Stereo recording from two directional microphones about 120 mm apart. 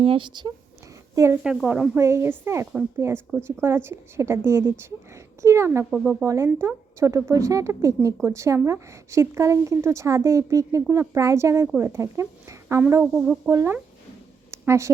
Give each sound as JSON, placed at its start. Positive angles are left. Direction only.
{"t": 0.0, "sound": "speech", "side_deg": -45}
{"t": 1.1, "sound": "a woman's voice", "side_deg": -25}
{"t": 1.5, "sound": "speech", "side_deg": -10}
{"t": 2.0, "sound": "a woman's voice", "side_deg": -25}
{"t": 13.1, "sound": "speech", "side_deg": -10}
{"t": 13.5, "sound": "a woman's voice", "side_deg": -25}
{"t": 14.5, "sound": "a sound", "side_deg": -25}